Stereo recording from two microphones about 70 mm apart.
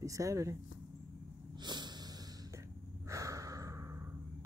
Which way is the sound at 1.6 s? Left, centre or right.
Right.